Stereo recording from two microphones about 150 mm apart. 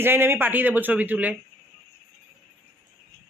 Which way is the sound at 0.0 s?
15° right (ahead or behind).